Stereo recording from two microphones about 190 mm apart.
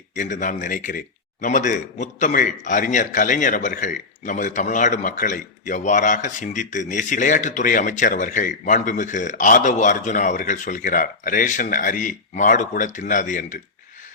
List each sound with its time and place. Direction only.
0.2 s a man's voice: 40° left (ahead or behind)